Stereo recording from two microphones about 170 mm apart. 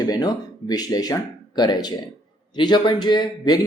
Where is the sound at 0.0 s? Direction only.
25° left (ahead or behind).